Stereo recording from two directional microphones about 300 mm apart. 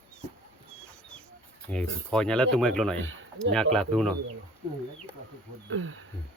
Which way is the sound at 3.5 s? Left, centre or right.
Centre.